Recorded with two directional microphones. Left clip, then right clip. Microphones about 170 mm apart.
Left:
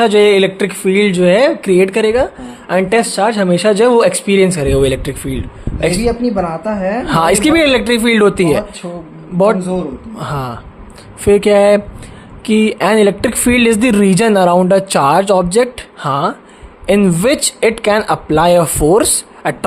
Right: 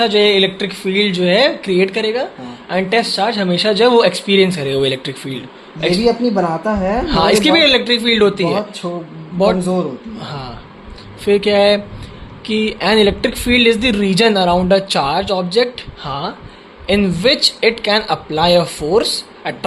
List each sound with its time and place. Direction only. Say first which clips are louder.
0.0 s speech: left 3 dB; 55° left (ahead or behind); by 5.4 s 35° left (ahead or behind)
6.0 s speech: right 1 dB; 45° right (ahead or behind)
7.1 s speech: left 1 dB; 55° left (ahead or behind)
10.2 s speech: left 7 dB; 55° left (ahead or behind)